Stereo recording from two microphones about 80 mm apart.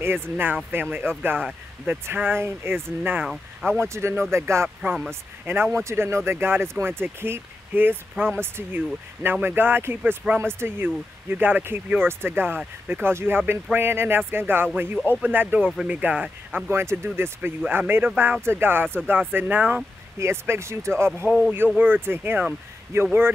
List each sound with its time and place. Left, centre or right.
0.0 s speech: right
20.2 s speech: right
21.3 s speech: centre